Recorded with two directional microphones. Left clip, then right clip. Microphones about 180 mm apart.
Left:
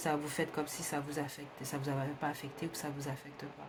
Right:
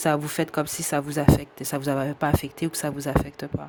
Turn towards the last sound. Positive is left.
turn(degrees=-55)  # may be behind; listen again after turning